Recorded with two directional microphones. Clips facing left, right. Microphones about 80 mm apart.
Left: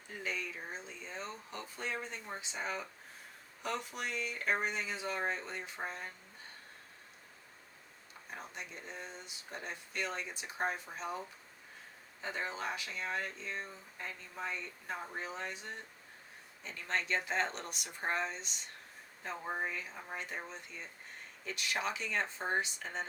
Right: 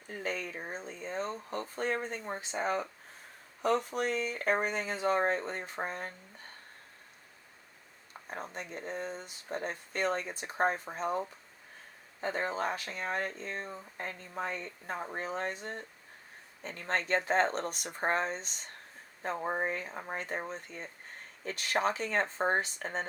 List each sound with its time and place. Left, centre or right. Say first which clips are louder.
0.1 s speech: right 4 dB; right
8.3 s speech: right 6 dB; right